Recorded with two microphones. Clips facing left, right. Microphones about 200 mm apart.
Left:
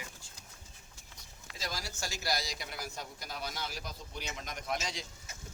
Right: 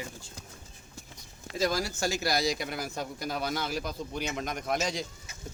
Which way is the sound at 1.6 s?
55° right (ahead or behind).